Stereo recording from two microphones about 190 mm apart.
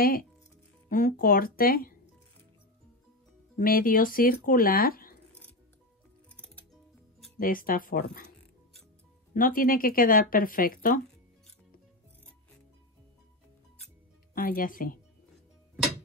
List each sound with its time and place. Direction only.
0.0 s speech: 50° left (ahead or behind)
3.5 s speech: 50° left (ahead or behind)
6.3 s music: 10° left (ahead or behind)
7.3 s speech: 50° left (ahead or behind)
9.3 s speech: 45° left (ahead or behind)
14.3 s speech: 50° left (ahead or behind)